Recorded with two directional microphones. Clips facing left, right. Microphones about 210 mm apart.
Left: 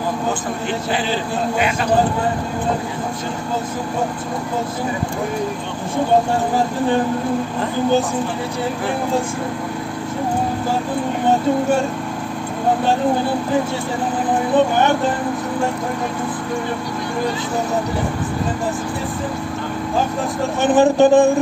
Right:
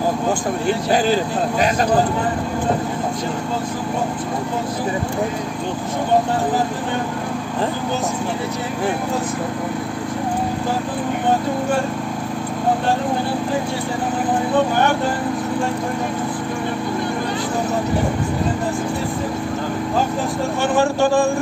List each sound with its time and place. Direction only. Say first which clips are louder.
0.9 s speech: right 5 dB; 45° right (ahead or behind)
20.6 s speech: left 6 dB; 20° left (ahead or behind)